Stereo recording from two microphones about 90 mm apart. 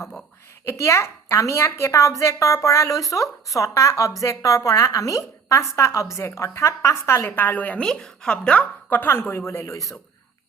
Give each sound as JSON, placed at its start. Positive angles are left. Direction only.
{"t": 0.0, "sound": "a child's voice", "side_deg": 5}
{"t": 0.6, "sound": "speech", "side_deg": 30}
{"t": 7.9, "sound": "a woman's voice", "side_deg": 5}